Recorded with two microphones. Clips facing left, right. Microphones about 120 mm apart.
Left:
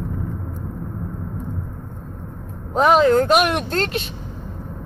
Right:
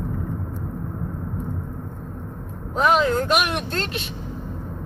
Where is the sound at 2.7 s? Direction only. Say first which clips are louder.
Left 5 dB; 40° left (ahead or behind).